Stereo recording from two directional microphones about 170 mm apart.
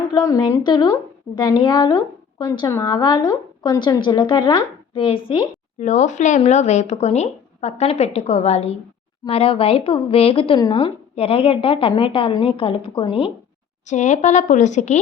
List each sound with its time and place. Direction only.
0.1 s a woman's voice: 25° left (ahead or behind)
5.8 s a woman's voice: 45° left (ahead or behind)
13.8 s a woman's voice: 45° left (ahead or behind)